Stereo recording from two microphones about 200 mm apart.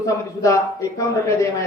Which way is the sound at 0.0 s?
15° left (ahead or behind).